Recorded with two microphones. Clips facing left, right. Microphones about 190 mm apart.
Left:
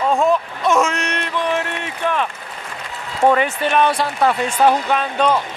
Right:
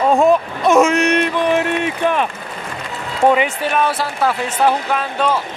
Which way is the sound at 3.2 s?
10° right (ahead or behind).